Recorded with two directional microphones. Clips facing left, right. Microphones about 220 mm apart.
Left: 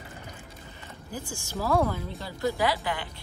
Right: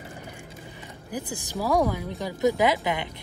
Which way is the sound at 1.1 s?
15° right (ahead or behind).